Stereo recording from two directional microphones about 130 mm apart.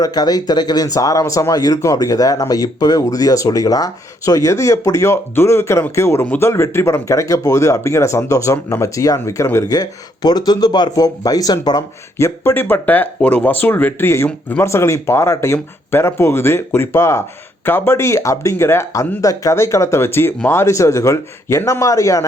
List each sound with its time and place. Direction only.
0.0 s speech: 30° left (ahead or behind)
12.2 s speech: 20° left (ahead or behind)